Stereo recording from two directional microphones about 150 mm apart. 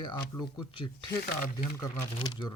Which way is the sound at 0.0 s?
30° left (ahead or behind).